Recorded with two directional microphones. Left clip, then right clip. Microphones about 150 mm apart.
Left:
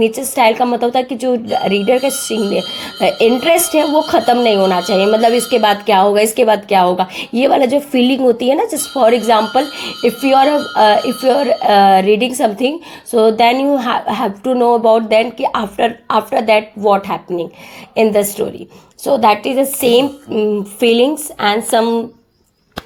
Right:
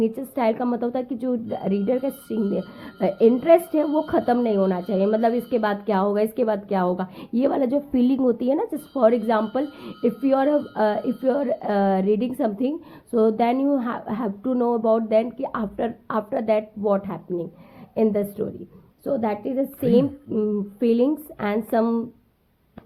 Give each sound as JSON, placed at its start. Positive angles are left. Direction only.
{"t": 0.0, "sound": "speech", "side_deg": 5}
{"t": 1.5, "sound": "a woman's voice", "side_deg": 15}
{"t": 3.7, "sound": "a woman's voice", "side_deg": 5}
{"t": 14.4, "sound": "a woman's voice", "side_deg": 0}